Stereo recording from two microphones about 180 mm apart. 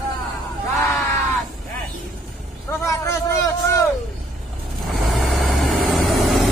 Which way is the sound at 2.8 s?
15° left (ahead or behind).